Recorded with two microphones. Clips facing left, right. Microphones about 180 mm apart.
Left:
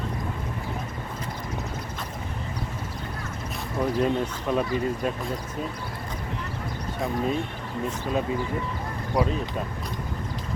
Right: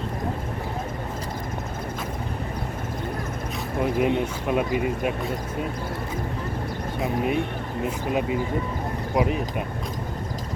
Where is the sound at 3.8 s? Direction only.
15° right (ahead or behind).